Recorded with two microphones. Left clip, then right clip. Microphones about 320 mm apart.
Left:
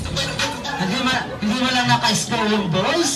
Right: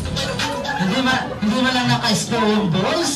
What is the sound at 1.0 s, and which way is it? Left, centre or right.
Music, centre.